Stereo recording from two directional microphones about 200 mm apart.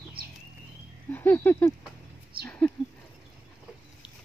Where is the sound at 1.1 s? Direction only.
10° left (ahead or behind).